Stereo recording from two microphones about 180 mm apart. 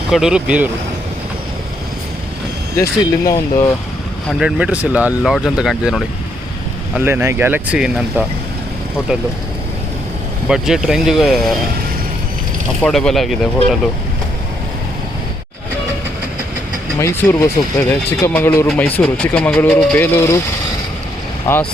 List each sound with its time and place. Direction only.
0.1 s speech: 5° right (ahead or behind)
2.7 s speech: 15° left (ahead or behind)
4.3 s speech: 5° right (ahead or behind)
10.5 s speech: centre (ahead or behind)
12.8 s speech: 5° left (ahead or behind)
17.0 s speech: 15° left (ahead or behind)
21.4 s speech: 10° left (ahead or behind)